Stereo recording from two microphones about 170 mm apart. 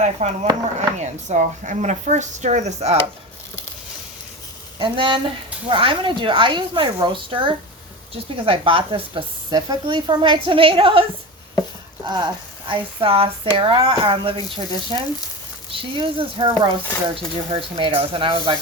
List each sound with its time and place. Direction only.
0.2 s speech: 40° right (ahead or behind)
4.8 s speech: 30° right (ahead or behind)
12.0 s speech: 25° right (ahead or behind)